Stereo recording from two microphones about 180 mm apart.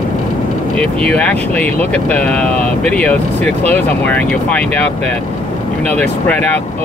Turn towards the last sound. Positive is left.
turn(degrees=10)  # may be behind; listen again after turning